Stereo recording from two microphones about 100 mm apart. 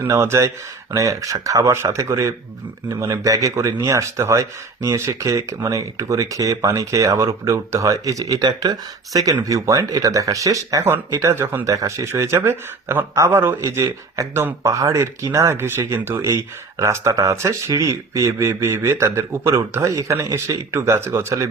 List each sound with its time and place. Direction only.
0.0 s speech: 25° right (ahead or behind)